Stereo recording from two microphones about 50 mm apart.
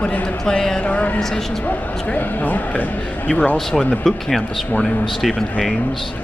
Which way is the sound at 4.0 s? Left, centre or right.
Centre.